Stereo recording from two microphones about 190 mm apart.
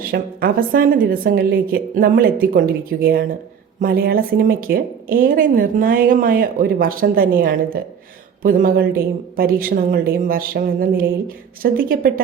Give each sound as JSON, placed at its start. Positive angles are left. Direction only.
{"t": 0.1, "sound": "speech", "side_deg": -50}